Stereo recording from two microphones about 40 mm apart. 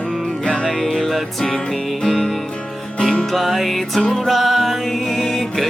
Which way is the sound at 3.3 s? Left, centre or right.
Centre.